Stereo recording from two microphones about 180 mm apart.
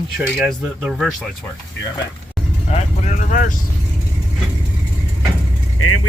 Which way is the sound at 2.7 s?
40° left (ahead or behind).